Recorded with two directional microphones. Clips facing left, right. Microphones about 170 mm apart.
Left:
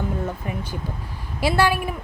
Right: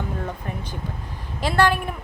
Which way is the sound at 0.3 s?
10° left (ahead or behind).